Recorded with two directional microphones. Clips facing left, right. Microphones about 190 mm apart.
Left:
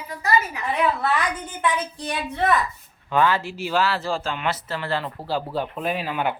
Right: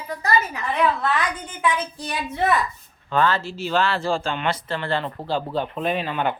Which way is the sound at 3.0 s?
15° left (ahead or behind).